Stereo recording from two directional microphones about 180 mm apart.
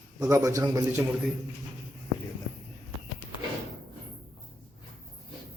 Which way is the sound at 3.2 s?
10° left (ahead or behind).